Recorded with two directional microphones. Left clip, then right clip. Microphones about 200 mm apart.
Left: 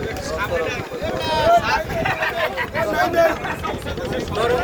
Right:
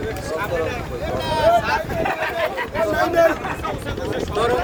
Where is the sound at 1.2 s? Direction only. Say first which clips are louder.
Left 1 dB; 50° right (ahead or behind).